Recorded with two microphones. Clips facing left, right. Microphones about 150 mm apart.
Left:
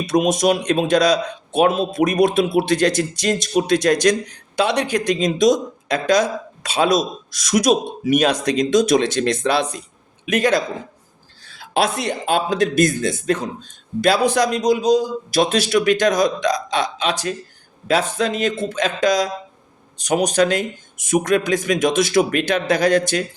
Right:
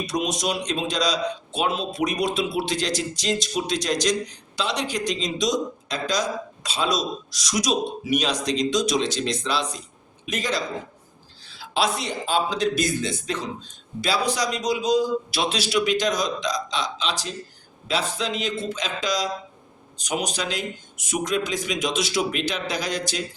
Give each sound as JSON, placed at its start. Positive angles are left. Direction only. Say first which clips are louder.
{"t": 0.0, "sound": "a man's voice", "louder": "left 9 dB", "side_deg": 55}